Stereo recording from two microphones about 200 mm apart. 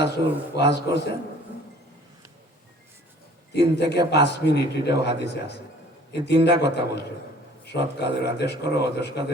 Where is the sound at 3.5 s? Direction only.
55° left (ahead or behind).